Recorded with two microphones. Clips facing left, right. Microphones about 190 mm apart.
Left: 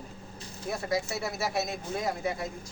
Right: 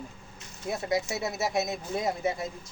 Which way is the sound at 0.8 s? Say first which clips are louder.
Right 2 dB; 20° right (ahead or behind).